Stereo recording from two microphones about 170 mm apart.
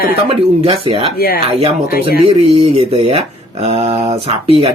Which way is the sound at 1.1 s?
60° left (ahead or behind).